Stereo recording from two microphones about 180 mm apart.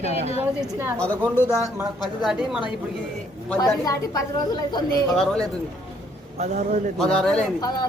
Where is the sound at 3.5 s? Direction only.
20° left (ahead or behind).